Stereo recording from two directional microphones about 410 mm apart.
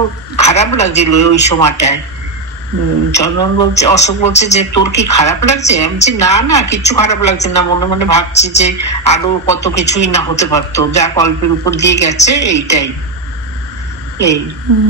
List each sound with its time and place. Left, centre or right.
0.4 s a woman's voice: centre
3.2 s a woman's voice: centre
11.7 s a woman's voice: left; by 12.9 s centre
14.1 s a woman's voice: centre